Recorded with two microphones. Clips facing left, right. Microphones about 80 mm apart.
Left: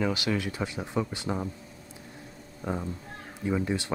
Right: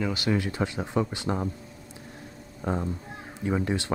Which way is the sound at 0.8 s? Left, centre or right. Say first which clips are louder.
Right 2 dB; centre.